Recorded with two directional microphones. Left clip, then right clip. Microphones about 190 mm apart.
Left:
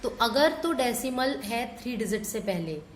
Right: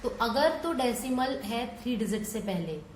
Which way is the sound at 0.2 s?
40° left (ahead or behind).